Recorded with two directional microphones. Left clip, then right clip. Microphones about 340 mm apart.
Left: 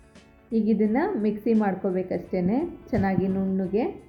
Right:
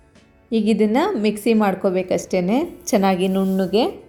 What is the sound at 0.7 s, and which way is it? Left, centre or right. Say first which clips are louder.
A woman's voice: right 7 dB; centre.